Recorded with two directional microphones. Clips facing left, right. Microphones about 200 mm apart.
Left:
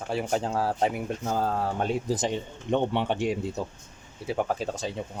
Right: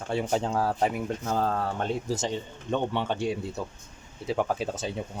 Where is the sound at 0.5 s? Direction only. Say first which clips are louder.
Left 1 dB; 25° left (ahead or behind).